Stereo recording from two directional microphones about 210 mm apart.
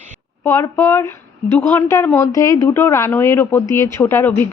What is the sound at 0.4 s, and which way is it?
A woman's voice, 10° left (ahead or behind).